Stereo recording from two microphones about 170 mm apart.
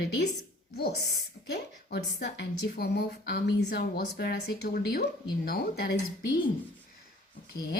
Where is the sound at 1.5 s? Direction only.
80° left; by 6.0 s 65° left (ahead or behind).